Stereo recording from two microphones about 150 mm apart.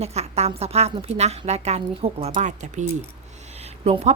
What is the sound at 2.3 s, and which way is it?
Speech, 55° right (ahead or behind).